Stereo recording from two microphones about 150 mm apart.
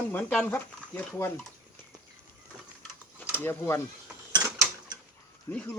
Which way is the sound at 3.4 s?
15° left (ahead or behind).